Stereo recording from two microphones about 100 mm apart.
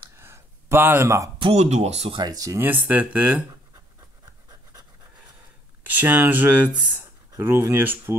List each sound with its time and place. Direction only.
0.2 s a sound: 25° right (ahead or behind)
1.4 s speech: 90° right
2.1 s speech: 40° right (ahead or behind)
2.9 s speech: 15° right (ahead or behind)
5.9 s speech: 20° right (ahead or behind)